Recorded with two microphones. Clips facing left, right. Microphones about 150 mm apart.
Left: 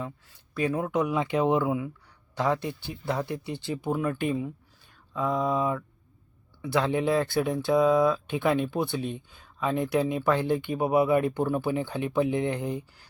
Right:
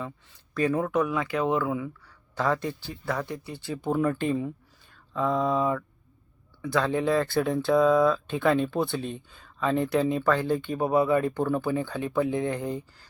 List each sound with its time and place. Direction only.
0.3 s speech: 5° left (ahead or behind)
3.8 s mantra: 5° left (ahead or behind)
4.2 s speech: 10° left (ahead or behind)
5.1 s mantra: 5° left (ahead or behind)
6.6 s speech: 15° left (ahead or behind)